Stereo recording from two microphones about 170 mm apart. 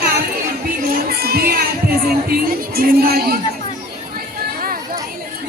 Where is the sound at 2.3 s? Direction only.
60° right (ahead or behind).